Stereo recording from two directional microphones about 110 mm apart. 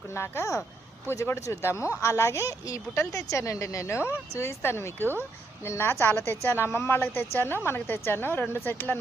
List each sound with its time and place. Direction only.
0.1 s speech: 25° left (ahead or behind)